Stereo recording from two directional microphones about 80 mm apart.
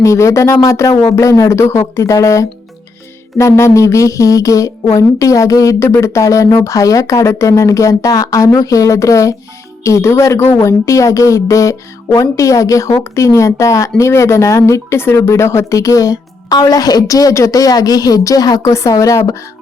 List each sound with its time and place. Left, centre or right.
0.0 s a woman's voice: left